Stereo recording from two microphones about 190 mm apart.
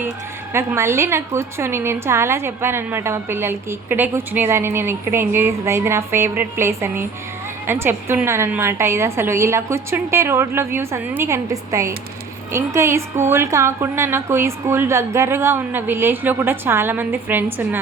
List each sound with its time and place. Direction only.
0.5 s a woman's voice: 15° right (ahead or behind)